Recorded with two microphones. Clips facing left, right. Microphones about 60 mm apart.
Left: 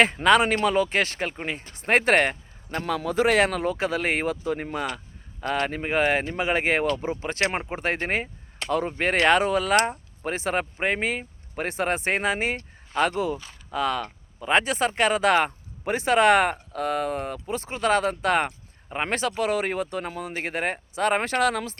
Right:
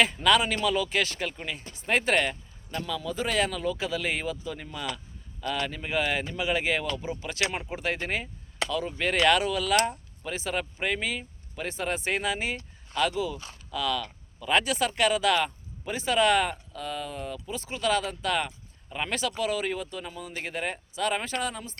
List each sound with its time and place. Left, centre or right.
0.0 s speech: left